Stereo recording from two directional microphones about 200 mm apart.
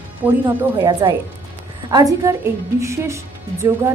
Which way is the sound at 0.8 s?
20° right (ahead or behind).